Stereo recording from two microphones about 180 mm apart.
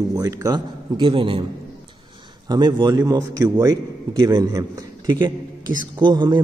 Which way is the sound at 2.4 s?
25° right (ahead or behind).